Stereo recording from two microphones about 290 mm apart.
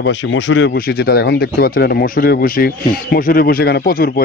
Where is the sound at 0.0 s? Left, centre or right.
Left.